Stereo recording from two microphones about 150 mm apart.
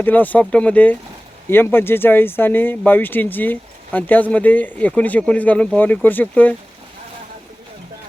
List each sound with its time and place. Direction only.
0.0 s speech: 10° left (ahead or behind)